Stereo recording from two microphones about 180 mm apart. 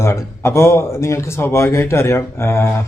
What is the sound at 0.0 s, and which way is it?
Speech, 15° left (ahead or behind).